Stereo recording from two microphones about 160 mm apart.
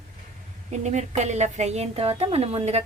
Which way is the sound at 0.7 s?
45° right (ahead or behind).